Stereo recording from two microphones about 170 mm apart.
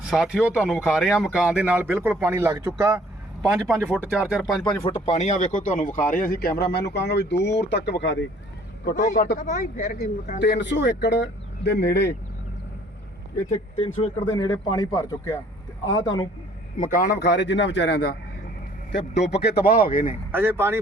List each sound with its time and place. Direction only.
0.0 s speech: centre (ahead or behind)
3.8 s speech: 5° left (ahead or behind)
4.6 s speech: 30° left (ahead or behind); by 8.3 s 90° left
8.8 s a man's voice: 80° left
9.0 s speech: 55° left (ahead or behind); by 12.1 s 80° left
13.7 s speech: 35° left (ahead or behind)
16.8 s speech: 55° left (ahead or behind)
20.3 s speech: 15° right (ahead or behind)